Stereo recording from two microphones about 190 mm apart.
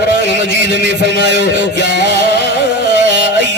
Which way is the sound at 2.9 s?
70° right (ahead or behind).